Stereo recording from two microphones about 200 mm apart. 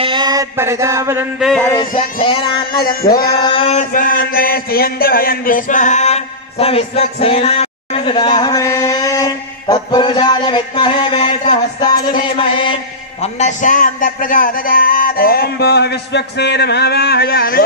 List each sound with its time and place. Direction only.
0.0 s a sound: 20° right (ahead or behind)
1.4 s a sound: 5° left (ahead or behind)
2.1 s speech: 25° left (ahead or behind)
2.8 s a man's voice: 45° left (ahead or behind)
3.3 s speech: 20° left (ahead or behind)
3.9 s a man's voice: 45° left (ahead or behind); by 12.7 s 25° left (ahead or behind)
13.2 s a man's voice: 35° left (ahead or behind)